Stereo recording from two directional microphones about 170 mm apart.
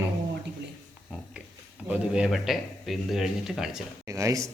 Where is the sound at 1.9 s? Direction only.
5° right (ahead or behind).